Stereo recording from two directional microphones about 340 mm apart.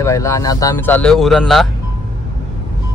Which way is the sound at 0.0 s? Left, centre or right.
Centre.